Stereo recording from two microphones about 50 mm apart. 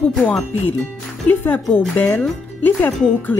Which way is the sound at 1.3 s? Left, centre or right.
Left.